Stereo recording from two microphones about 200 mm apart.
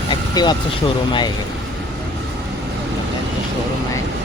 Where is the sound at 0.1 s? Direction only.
20° left (ahead or behind).